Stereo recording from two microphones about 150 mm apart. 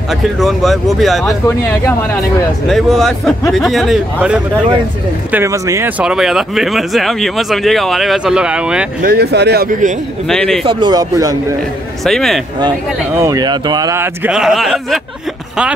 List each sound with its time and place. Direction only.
0.4 s speech: centre (ahead or behind)
2.7 s speech: centre (ahead or behind)
5.3 s speech: 20° right (ahead or behind)
5.9 s speech: 5° right (ahead or behind)
9.0 s speech: 90° right; by 9.9 s 60° right (ahead or behind)
10.2 s speech: 5° left (ahead or behind)
10.6 s speech: 30° right (ahead or behind)
12.0 s speech: centre (ahead or behind)
13.2 s speech: 25° right (ahead or behind)
14.2 s speech: 5° right (ahead or behind)